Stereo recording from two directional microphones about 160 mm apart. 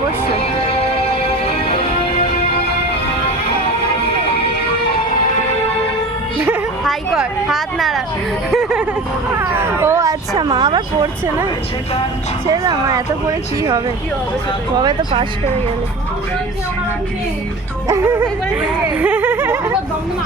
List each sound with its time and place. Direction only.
0.7 s music: 40° left (ahead or behind)
6.8 s a woman's voice: centre (ahead or behind)
9.4 s speech: 15° right (ahead or behind)
12.5 s speech: 20° right (ahead or behind)
17.8 s speech: 15° right (ahead or behind)
18.9 s a sound: 10° right (ahead or behind)